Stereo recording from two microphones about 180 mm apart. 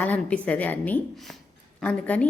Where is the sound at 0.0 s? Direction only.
10° left (ahead or behind).